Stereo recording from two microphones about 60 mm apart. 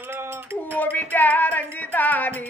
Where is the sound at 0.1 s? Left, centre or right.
Right.